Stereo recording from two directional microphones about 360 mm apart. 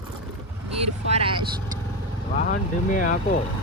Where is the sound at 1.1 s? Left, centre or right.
Centre.